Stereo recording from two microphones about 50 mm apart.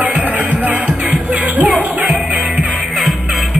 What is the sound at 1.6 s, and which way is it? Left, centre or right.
Music, right.